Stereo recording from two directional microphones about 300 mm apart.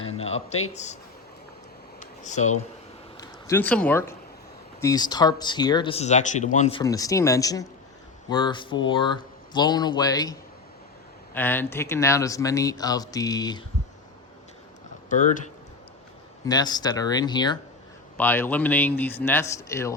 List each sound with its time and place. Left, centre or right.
0.1 s speech: centre
2.0 s a sound: left
3.2 s a man's voice: centre
11.3 s speech: centre
16.5 s speech: centre